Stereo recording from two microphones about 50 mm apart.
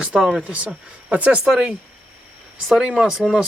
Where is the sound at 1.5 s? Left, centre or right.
Centre.